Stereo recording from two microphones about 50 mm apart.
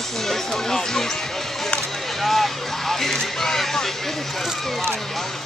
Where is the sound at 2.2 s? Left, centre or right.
Centre.